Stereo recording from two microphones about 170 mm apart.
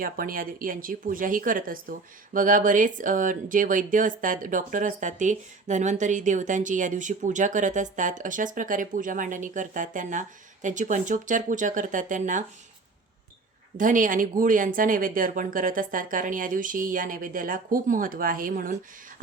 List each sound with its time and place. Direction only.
0.0 s speech: 55° right (ahead or behind)
13.7 s speech: 50° right (ahead or behind)